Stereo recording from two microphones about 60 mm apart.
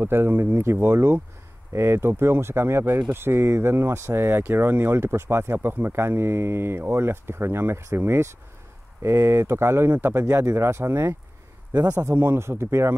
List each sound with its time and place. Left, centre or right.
0.0 s speech: right
9.9 s speech: right
10.3 s speech: right